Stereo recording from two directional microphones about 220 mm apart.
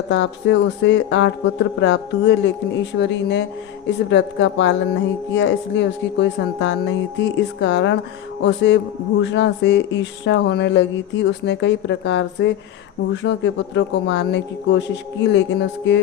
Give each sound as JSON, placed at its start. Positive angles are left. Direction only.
{"t": 0.1, "sound": "speech", "side_deg": 55}